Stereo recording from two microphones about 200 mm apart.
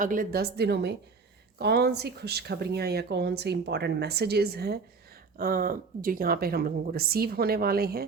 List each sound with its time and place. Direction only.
0.0 s speech: 45° right (ahead or behind)